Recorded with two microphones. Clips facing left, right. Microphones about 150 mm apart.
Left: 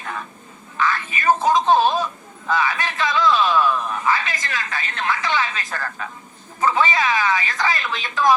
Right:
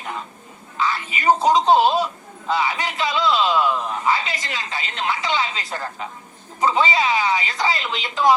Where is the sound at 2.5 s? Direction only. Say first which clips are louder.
Even; 20° right (ahead or behind).